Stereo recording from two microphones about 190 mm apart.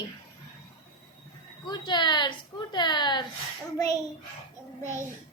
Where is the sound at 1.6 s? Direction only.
20° left (ahead or behind).